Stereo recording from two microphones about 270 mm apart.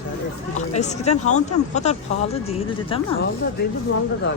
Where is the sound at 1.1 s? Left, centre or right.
Left.